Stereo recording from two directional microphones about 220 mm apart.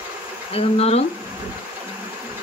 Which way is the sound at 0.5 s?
25° left (ahead or behind).